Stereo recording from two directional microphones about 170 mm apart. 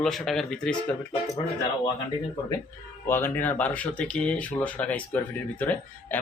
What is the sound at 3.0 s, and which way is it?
Speech, 15° left (ahead or behind).